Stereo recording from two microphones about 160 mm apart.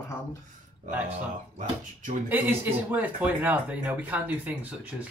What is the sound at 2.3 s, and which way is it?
Speech, 10° right (ahead or behind).